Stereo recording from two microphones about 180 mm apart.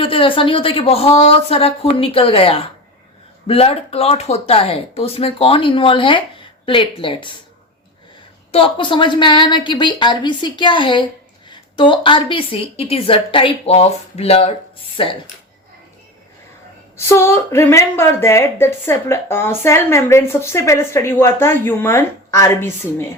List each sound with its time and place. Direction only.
0.0 s a woman's voice: 30° left (ahead or behind)
8.5 s a woman's voice: 30° left (ahead or behind)
17.1 s a woman's voice: 15° left (ahead or behind)